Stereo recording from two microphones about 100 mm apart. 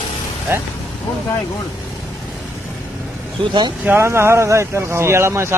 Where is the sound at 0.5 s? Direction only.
20° right (ahead or behind).